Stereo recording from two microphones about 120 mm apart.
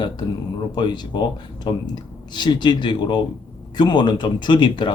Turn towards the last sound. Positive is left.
turn(degrees=40)  # may be behind; listen again after turning